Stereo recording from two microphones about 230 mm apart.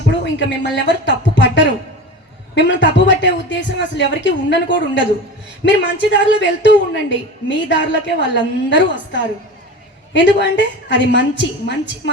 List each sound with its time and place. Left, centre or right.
0.1 s a woman's voice: left